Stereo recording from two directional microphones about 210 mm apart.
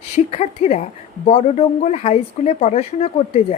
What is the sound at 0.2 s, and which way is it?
Speech, 30° left (ahead or behind).